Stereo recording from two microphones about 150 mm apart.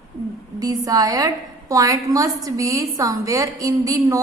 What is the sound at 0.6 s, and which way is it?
A woman's voice, 25° right (ahead or behind).